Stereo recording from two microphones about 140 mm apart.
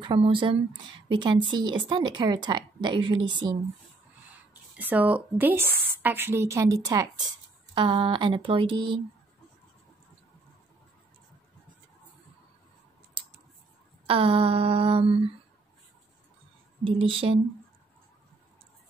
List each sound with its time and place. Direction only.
0.0 s speech: 35° right (ahead or behind)
4.7 s a woman's voice: 10° right (ahead or behind); by 9.0 s 35° right (ahead or behind)
14.0 s speech: 40° right (ahead or behind)
16.8 s speech: 40° right (ahead or behind)